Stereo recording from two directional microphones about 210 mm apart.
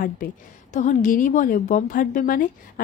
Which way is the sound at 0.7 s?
35° left (ahead or behind).